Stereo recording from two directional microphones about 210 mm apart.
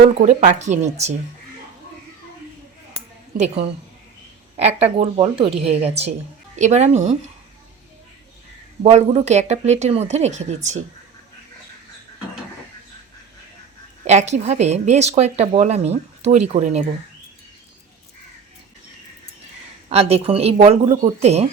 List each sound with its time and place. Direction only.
0.2 s speech: 35° right (ahead or behind)
3.3 s speech: 30° right (ahead or behind)
8.8 s speech: 30° right (ahead or behind)
14.0 s speech: 35° right (ahead or behind)
19.9 s speech: 30° right (ahead or behind)